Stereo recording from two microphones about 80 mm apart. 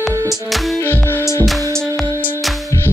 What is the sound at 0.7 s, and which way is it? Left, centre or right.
Music, left.